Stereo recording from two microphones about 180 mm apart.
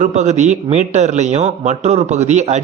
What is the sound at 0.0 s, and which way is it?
A man's voice, 40° right (ahead or behind).